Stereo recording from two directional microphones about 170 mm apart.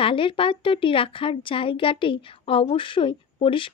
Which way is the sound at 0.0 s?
30° left (ahead or behind).